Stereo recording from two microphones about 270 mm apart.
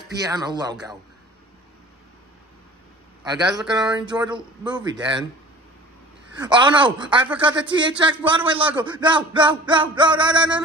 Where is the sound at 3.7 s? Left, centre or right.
Centre.